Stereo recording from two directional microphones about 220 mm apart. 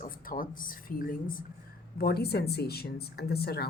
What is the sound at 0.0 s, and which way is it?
A woman's voice, 40° left (ahead or behind).